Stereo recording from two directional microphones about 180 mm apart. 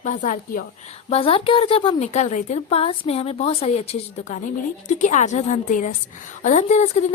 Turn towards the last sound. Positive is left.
turn(degrees=40)  # may be behind; listen again after turning